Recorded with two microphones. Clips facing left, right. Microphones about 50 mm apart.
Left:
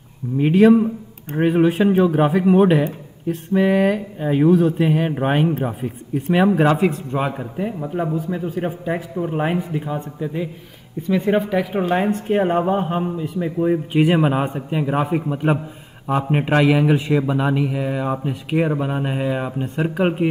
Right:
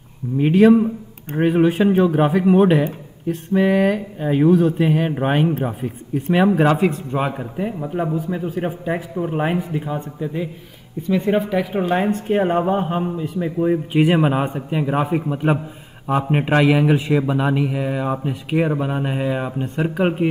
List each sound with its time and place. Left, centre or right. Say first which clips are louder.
0.4 s a man's voice: even; centre
3.3 s a man's voice: even; centre
11.1 s speech: even; centre
11.3 s a man's voice: even; centre